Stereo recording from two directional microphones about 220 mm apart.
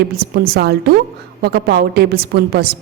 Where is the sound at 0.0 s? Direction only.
45° right (ahead or behind).